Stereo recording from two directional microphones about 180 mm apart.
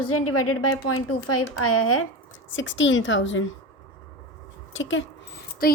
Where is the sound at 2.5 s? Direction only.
90° left.